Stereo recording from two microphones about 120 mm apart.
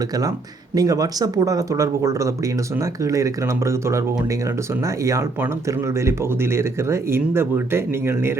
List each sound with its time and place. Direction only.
0.2 s speech: 30° right (ahead or behind)
5.0 s speech: 25° right (ahead or behind)